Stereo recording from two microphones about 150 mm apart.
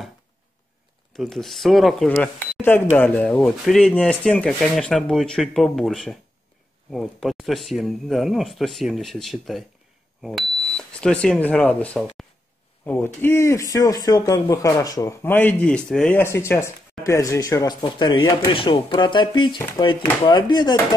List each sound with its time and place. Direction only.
1.1 s speech: centre (ahead or behind)
2.0 s speech: 10° left (ahead or behind)
10.8 s speech: 5° left (ahead or behind); by 15.1 s 25° left (ahead or behind)
15.2 s speech: 10° left (ahead or behind)
16.2 s speech: 15° left (ahead or behind)